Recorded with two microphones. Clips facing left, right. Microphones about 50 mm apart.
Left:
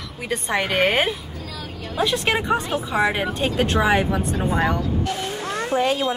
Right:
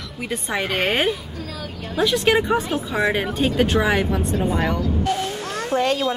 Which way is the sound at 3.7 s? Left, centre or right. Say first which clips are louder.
Even; centre.